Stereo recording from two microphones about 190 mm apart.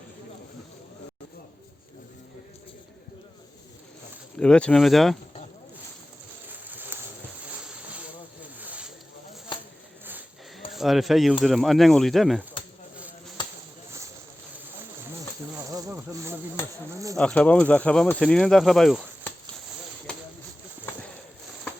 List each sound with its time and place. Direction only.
4.4 s speech: 5° left (ahead or behind)
6.5 s a sound: 10° right (ahead or behind)
8.5 s vehicle: 10° right (ahead or behind)
10.7 s speech: centre (ahead or behind)
13.0 s chop: 5° right (ahead or behind)
15.5 s a sound: 20° right (ahead or behind)
16.9 s insect: 15° right (ahead or behind)
17.2 s speech: 5° left (ahead or behind)